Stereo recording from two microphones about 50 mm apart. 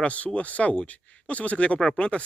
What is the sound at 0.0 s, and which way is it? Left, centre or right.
Speech, left.